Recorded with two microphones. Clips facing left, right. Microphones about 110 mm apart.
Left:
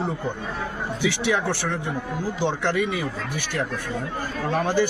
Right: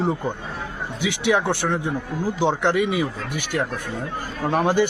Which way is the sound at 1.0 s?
15° right (ahead or behind).